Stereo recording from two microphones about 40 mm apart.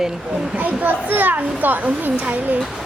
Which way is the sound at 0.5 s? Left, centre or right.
Right.